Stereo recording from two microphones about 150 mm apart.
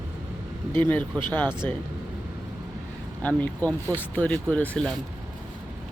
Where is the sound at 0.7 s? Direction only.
15° left (ahead or behind).